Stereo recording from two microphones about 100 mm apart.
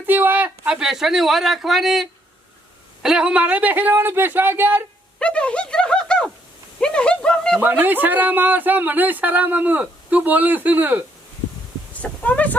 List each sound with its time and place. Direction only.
0.0 s speech: 20° right (ahead or behind)
5.2 s speech: 10° left (ahead or behind)
7.6 s speech: 20° right (ahead or behind)
12.2 s speech: 15° left (ahead or behind)